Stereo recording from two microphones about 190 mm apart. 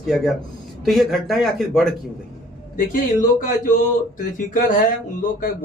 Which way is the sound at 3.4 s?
45° left (ahead or behind).